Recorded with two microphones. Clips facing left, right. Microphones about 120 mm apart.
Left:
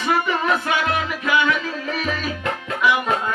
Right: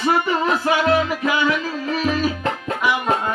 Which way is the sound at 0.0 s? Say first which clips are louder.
Right 2 dB; 30° right (ahead or behind).